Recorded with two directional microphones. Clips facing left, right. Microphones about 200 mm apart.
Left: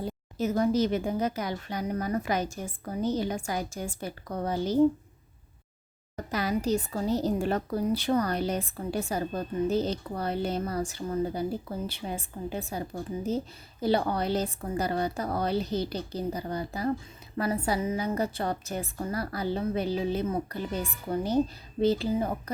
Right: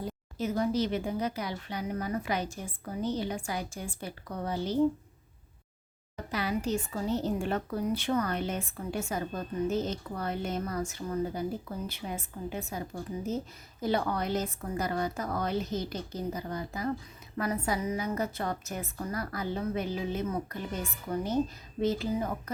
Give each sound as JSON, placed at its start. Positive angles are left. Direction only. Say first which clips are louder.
{"t": 0.3, "sound": "speech", "louder": "left 4 dB", "side_deg": 45}
{"t": 6.3, "sound": "a woman's voice", "louder": "left 3 dB", "side_deg": 40}